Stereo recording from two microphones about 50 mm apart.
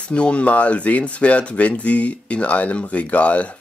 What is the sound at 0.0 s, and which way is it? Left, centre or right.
Speech, left.